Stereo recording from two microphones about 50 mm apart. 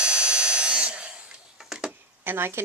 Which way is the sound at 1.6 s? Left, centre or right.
Centre.